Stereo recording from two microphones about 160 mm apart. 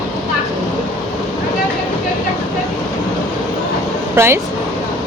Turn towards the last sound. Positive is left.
turn(degrees=-15)  # may be behind; listen again after turning